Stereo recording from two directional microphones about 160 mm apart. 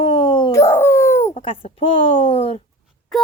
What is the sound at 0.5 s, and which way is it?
Speech, 15° left (ahead or behind).